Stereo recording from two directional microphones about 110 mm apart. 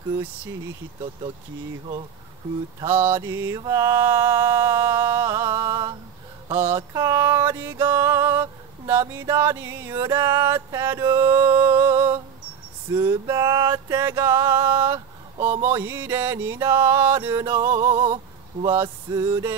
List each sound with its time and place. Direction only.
2.9 s mantra: 20° right (ahead or behind)
6.5 s mantra: 20° right (ahead or behind)
6.9 s a sound: 30° right (ahead or behind)
12.9 s male singing: 40° right (ahead or behind)
13.9 s mantra: 25° right (ahead or behind)
18.0 s a sound: 55° right (ahead or behind)
19.1 s male singing: 35° right (ahead or behind)